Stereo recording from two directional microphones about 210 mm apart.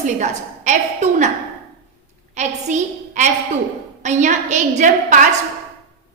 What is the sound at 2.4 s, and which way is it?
A woman's voice, 35° right (ahead or behind).